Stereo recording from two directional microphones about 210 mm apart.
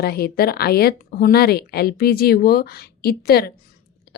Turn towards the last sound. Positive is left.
turn(degrees=45)  # may be behind; listen again after turning